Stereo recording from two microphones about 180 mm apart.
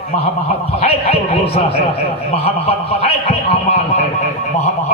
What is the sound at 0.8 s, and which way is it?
Speech, 35° left (ahead or behind).